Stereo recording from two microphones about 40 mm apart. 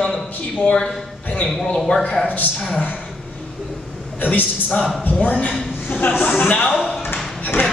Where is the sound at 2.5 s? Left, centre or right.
Left.